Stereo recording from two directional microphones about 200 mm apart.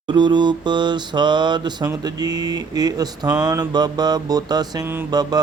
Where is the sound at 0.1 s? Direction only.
20° right (ahead or behind).